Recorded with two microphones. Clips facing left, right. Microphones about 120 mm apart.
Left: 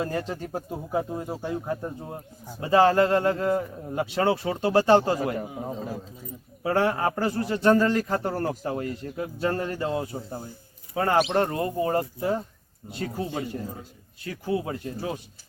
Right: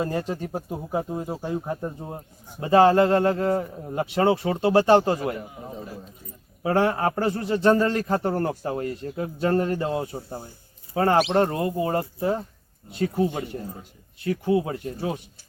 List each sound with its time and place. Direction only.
0.0 s speech: 20° right (ahead or behind)
6.6 s speech: 25° right (ahead or behind)